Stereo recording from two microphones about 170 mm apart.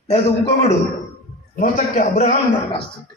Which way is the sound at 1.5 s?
50° left (ahead or behind).